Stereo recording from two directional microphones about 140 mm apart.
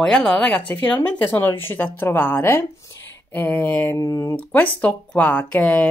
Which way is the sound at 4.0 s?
25° left (ahead or behind).